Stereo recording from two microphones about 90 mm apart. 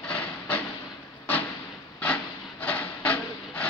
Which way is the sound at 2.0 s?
15° left (ahead or behind).